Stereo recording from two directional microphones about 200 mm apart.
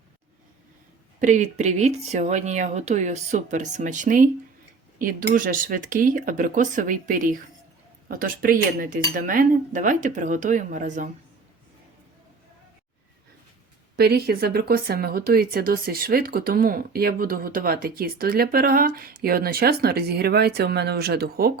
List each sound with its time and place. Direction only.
1.2 s speech: 35° right (ahead or behind)
13.9 s speech: 55° right (ahead or behind)